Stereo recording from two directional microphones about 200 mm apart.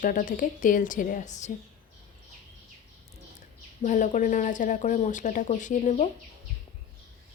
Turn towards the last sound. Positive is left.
turn(degrees=35)  # may be behind; listen again after turning